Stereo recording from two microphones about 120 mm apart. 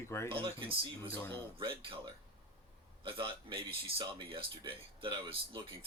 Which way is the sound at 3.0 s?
45° right (ahead or behind).